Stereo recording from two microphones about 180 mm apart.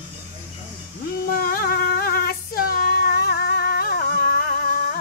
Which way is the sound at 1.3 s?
55° left (ahead or behind).